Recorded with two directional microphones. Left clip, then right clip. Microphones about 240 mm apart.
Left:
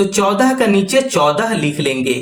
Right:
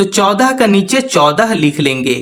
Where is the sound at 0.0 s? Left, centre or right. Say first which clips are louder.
Right 3 dB; right.